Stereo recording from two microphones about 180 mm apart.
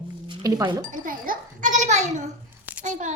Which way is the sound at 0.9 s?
50° right (ahead or behind).